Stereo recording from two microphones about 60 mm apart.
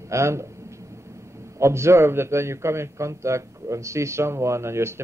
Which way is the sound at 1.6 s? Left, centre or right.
Right.